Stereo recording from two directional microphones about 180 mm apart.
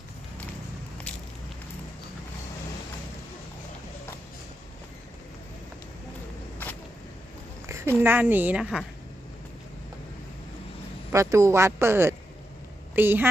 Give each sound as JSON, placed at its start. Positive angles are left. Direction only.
{"t": 8.0, "sound": "speech", "side_deg": -10}
{"t": 11.1, "sound": "speech", "side_deg": -15}